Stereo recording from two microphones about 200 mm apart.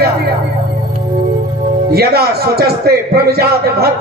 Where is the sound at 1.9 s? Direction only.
50° right (ahead or behind).